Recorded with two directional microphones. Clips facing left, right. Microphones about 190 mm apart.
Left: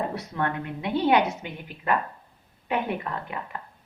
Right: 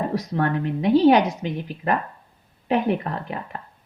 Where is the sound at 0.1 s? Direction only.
40° right (ahead or behind).